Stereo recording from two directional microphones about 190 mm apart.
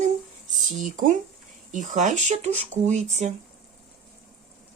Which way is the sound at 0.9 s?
45° right (ahead or behind).